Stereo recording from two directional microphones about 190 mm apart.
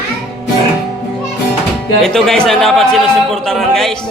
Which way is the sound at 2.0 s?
Centre (ahead or behind).